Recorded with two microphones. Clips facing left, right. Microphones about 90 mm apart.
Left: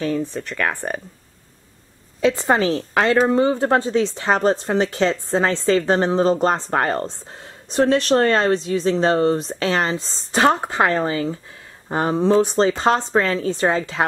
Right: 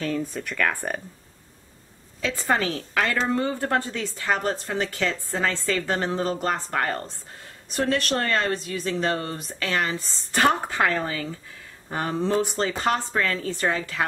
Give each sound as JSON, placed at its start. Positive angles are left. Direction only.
{"t": 0.2, "sound": "speech", "side_deg": -5}
{"t": 2.2, "sound": "speech", "side_deg": 20}